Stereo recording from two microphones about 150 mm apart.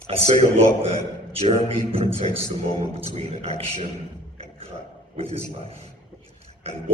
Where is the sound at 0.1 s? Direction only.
45° right (ahead or behind).